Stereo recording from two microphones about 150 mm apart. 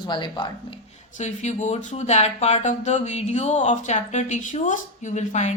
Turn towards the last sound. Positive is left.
turn(degrees=50)  # may be behind; listen again after turning